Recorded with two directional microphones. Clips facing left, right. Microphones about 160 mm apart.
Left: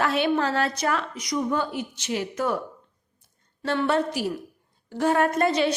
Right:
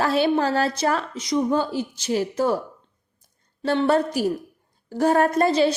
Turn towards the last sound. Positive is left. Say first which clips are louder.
# right 3 dB
turn(degrees=-35)  # may be behind; listen again after turning